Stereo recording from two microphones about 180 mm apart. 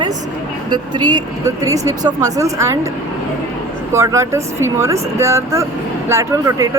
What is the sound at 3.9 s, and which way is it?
Speech, 15° right (ahead or behind).